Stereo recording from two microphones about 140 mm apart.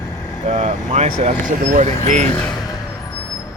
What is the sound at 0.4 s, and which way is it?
Speech, 60° right (ahead or behind).